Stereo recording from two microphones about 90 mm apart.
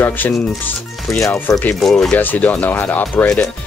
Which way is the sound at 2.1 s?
20° left (ahead or behind).